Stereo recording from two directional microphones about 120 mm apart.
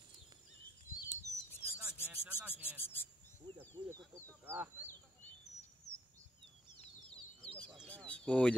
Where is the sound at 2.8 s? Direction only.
15° left (ahead or behind).